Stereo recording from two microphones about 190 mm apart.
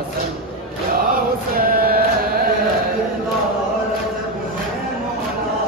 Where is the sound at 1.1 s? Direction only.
50° right (ahead or behind).